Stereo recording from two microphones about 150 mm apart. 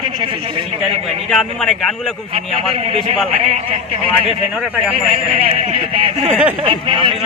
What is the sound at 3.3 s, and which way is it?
Speech, 40° right (ahead or behind).